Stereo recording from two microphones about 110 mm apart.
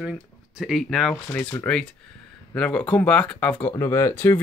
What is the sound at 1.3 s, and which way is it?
Speech, 15° left (ahead or behind).